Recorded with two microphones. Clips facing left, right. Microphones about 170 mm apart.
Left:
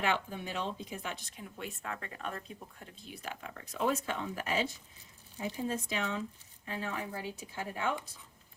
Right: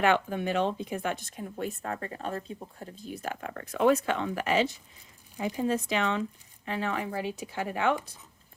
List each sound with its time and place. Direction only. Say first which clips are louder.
0.0 s speech: right 8 dB; 60° right (ahead or behind); by 7.9 s 75° right (ahead or behind)